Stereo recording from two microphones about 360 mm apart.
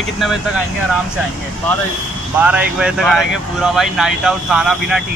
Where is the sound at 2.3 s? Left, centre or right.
Centre.